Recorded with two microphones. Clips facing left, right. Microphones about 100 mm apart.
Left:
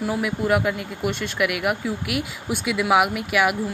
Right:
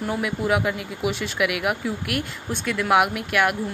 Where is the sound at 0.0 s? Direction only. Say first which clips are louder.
Left 1 dB; centre (ahead or behind).